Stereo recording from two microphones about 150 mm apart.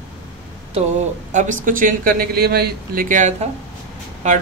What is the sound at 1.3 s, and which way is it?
Speech, 55° right (ahead or behind).